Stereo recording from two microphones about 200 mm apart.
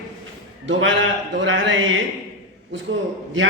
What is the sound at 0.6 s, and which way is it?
A man's voice, 70° right (ahead or behind).